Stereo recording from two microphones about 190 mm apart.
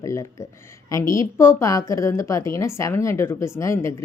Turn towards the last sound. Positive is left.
turn(degrees=15)  # may be behind; listen again after turning